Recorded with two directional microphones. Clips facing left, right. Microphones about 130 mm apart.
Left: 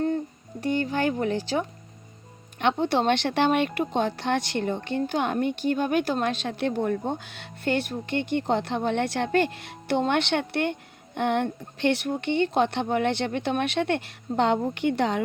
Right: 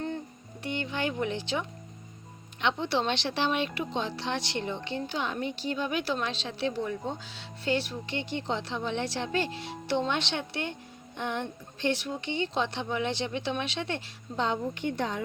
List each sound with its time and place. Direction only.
0.6 s speech: 40° left (ahead or behind); by 15.2 s 80° left